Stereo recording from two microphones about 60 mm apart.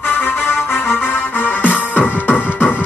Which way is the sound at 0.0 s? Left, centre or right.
Left.